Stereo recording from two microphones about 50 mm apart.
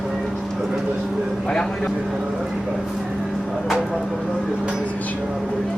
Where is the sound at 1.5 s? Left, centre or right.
Centre.